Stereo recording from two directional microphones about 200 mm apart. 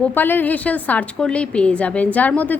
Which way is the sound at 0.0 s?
10° left (ahead or behind).